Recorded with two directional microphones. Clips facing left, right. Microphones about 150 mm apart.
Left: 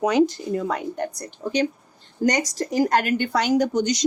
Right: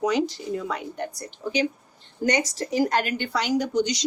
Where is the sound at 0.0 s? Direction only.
55° left (ahead or behind).